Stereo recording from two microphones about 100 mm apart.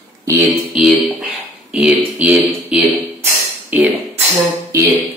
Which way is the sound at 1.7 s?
10° right (ahead or behind).